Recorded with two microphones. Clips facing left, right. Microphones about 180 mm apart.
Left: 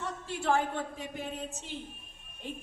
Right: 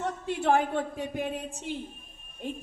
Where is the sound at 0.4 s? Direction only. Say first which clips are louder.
Right 4 dB; 60° right (ahead or behind).